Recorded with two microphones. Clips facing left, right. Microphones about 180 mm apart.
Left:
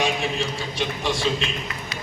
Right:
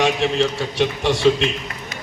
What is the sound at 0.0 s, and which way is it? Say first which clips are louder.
A man's voice: right 6 dB; 70° right (ahead or behind).